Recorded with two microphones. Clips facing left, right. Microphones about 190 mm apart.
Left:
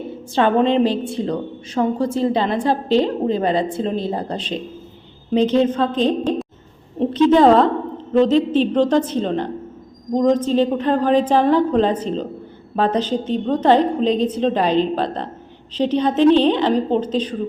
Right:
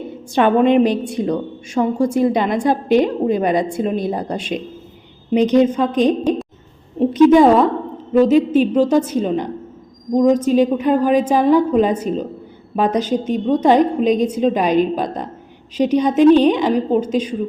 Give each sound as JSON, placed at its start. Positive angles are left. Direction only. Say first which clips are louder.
{"t": 0.3, "sound": "a woman's voice", "louder": "right 3 dB", "side_deg": -15}